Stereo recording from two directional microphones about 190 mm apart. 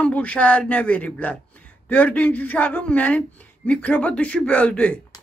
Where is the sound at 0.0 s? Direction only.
5° left (ahead or behind).